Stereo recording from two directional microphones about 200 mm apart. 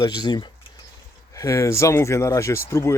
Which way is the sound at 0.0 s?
20° left (ahead or behind).